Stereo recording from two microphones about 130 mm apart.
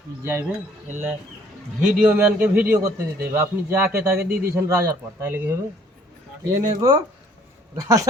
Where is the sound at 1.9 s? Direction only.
10° right (ahead or behind).